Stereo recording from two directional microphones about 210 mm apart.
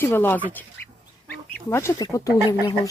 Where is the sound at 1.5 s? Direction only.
10° left (ahead or behind).